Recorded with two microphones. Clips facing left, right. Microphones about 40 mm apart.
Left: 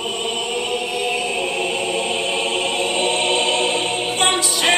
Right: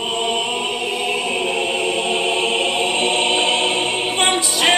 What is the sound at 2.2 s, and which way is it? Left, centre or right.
Music, centre.